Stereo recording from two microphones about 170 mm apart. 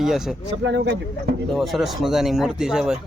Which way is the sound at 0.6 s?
85° right.